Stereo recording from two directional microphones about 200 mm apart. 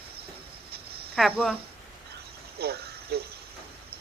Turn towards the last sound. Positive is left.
turn(degrees=-50)  # may be behind; listen again after turning